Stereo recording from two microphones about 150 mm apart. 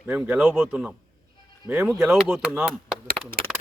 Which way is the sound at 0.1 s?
10° right (ahead or behind).